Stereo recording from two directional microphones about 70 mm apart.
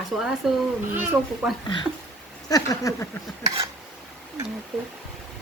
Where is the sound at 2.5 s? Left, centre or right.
Left.